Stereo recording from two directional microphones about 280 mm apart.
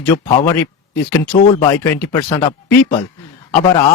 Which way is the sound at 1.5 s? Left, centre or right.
Centre.